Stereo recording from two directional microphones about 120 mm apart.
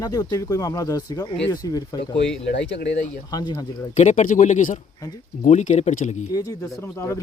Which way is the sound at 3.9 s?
85° left.